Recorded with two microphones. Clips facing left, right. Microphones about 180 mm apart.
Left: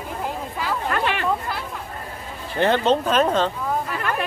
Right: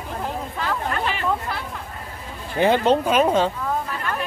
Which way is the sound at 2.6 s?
10° right (ahead or behind).